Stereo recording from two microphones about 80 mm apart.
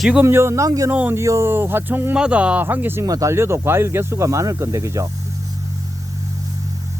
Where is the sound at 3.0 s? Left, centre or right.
Right.